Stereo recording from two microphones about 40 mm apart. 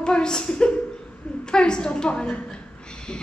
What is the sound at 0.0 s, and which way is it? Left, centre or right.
A woman's voice, centre.